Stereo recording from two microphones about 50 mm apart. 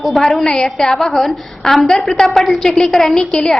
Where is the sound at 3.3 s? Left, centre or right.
Centre.